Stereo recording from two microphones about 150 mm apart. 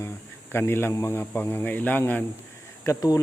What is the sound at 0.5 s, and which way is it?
Speech, 15° left (ahead or behind).